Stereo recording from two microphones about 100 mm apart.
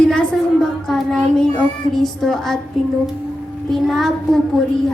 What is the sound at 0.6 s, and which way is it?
Child singing, 5° left (ahead or behind).